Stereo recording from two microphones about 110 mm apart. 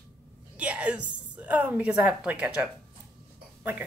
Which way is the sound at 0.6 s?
10° right (ahead or behind).